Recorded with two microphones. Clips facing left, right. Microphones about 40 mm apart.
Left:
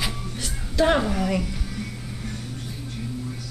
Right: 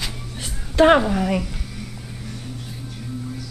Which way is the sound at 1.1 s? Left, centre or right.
Centre.